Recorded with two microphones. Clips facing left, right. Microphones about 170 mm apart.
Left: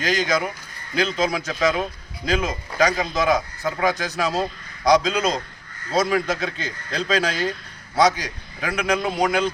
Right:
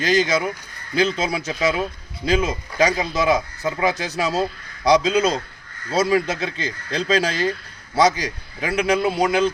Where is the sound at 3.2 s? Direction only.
30° right (ahead or behind).